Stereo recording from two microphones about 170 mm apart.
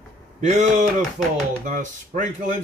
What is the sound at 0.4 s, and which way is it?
Speech, 45° right (ahead or behind).